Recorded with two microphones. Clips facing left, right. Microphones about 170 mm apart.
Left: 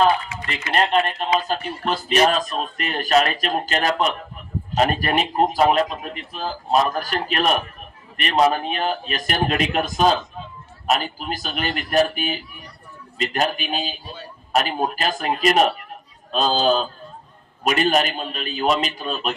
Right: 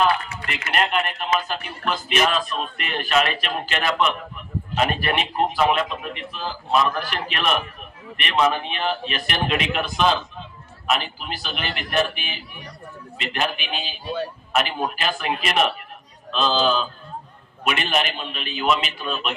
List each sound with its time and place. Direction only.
0.4 s speech: 35° left (ahead or behind)
14.0 s a man's voice: 65° right (ahead or behind)
14.5 s speech: 40° left (ahead or behind)